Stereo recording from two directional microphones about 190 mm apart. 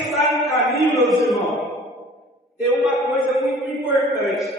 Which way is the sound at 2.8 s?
Centre (ahead or behind).